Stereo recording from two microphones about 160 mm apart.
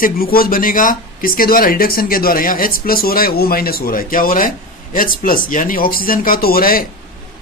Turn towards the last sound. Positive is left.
turn(degrees=60)  # may be behind; listen again after turning